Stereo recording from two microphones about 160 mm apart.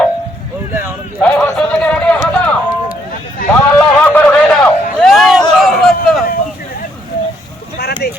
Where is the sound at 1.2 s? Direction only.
5° left (ahead or behind).